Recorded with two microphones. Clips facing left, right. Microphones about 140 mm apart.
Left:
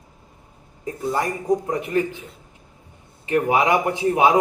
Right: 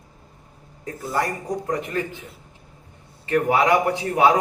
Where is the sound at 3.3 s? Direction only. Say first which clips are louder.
Even; 15° left (ahead or behind).